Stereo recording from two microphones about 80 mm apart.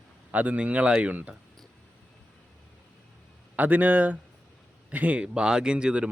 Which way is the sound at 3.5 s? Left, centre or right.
Right.